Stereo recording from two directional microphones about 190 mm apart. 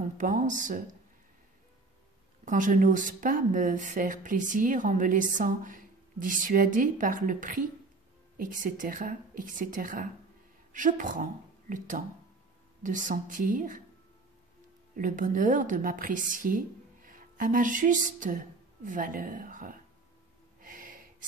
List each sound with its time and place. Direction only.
0.2 s speech: 45° right (ahead or behind)
2.4 s speech: 45° right (ahead or behind)
15.0 s a woman's voice: 45° right (ahead or behind)
20.6 s gasp: 45° right (ahead or behind)